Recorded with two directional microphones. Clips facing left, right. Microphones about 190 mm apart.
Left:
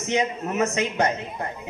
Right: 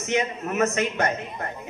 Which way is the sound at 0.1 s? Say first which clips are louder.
Left 1 dB; 20° left (ahead or behind).